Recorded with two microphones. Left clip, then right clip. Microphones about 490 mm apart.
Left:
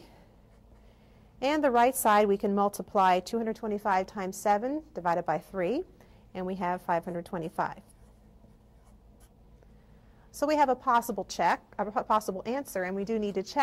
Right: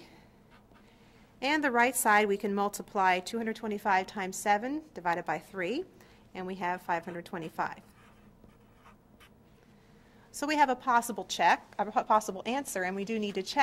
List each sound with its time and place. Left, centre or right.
1.4 s a woman's voice: left
10.3 s a woman's voice: left